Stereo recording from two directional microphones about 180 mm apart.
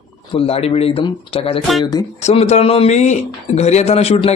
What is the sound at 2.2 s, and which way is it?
Speech, 35° left (ahead or behind).